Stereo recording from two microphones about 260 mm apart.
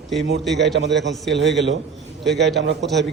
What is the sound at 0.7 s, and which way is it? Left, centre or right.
Speech, right.